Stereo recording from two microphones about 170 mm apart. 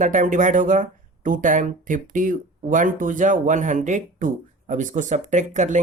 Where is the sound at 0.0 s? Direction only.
50° right (ahead or behind).